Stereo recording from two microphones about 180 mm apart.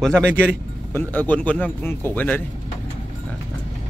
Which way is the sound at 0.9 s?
10° left (ahead or behind).